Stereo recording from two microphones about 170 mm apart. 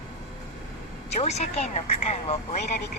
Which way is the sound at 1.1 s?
40° left (ahead or behind).